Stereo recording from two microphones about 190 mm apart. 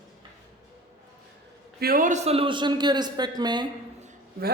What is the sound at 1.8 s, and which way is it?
A man's voice, 50° right (ahead or behind).